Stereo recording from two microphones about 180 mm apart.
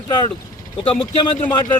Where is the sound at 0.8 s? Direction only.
30° left (ahead or behind).